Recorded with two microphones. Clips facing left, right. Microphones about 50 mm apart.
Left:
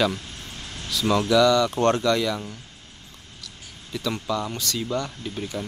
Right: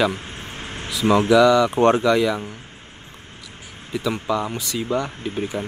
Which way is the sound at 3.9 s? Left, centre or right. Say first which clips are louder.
Right 4 dB; centre.